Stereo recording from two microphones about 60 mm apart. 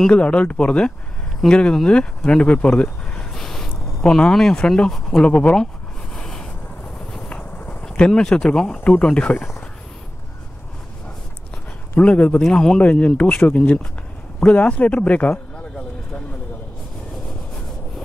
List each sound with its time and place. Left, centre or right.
0.1 s a man's voice: centre
2.8 s a sound: centre
3.3 s a sound: centre
4.1 s speech: centre
5.2 s a man's voice: left
6.1 s a sound: centre
7.2 s vehicle: left
7.8 s speech: centre
8.8 s a man's voice: left
12.0 s a man's voice: left
12.4 s speech: centre
12.8 s a man's voice: left